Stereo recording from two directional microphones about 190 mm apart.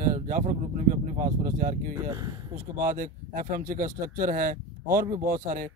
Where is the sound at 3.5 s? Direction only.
45° right (ahead or behind).